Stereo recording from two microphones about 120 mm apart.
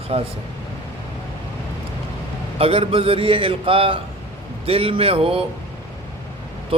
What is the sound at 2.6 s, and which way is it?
Speech, 50° right (ahead or behind).